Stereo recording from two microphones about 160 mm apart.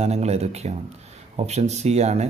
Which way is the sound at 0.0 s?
40° right (ahead or behind).